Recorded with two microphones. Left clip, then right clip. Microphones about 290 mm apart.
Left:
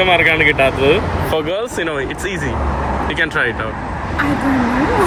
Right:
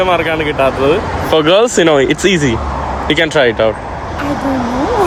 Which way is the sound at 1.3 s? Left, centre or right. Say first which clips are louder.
Right 12 dB; right.